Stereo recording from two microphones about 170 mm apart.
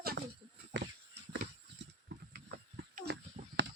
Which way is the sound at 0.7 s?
90° right.